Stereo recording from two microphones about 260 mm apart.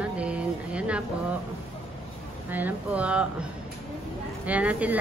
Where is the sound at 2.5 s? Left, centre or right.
Centre.